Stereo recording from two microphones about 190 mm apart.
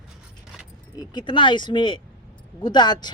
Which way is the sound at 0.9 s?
25° left (ahead or behind).